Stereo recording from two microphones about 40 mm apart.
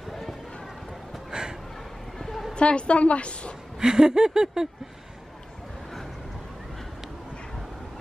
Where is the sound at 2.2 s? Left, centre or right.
Centre.